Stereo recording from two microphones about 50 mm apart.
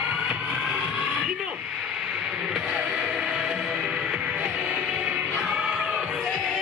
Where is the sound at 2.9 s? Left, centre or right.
Centre.